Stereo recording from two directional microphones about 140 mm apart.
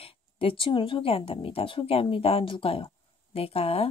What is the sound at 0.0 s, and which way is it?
A woman's voice, 40° left (ahead or behind).